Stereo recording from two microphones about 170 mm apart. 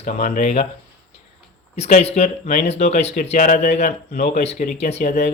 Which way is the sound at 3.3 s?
50° left (ahead or behind).